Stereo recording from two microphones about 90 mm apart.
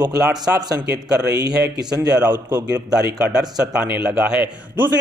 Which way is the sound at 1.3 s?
45° right (ahead or behind).